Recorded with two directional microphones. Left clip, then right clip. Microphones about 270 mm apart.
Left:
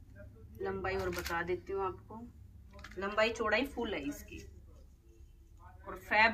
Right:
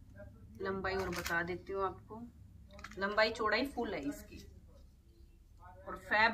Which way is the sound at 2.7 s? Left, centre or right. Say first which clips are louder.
Right 1 dB; centre.